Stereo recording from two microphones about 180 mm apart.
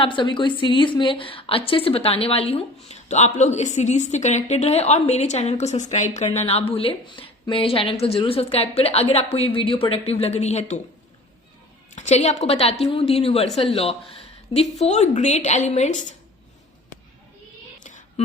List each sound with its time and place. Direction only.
0.0 s a woman's voice: 25° left (ahead or behind)
11.9 s a woman's voice: 40° left (ahead or behind)
17.7 s a sound: 45° left (ahead or behind)